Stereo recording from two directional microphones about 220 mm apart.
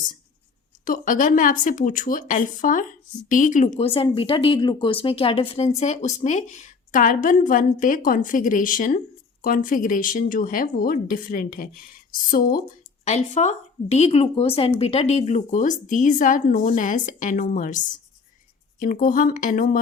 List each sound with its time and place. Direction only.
0.9 s speech: 40° left (ahead or behind)
3.8 s speech: 25° left (ahead or behind)
18.8 s speech: 40° left (ahead or behind)